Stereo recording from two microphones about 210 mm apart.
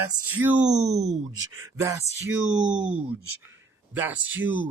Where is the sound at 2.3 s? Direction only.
5° right (ahead or behind).